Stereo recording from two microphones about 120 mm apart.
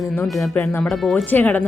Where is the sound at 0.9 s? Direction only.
Centre (ahead or behind).